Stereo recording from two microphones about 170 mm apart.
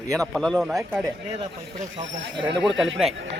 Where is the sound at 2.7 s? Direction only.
5° right (ahead or behind).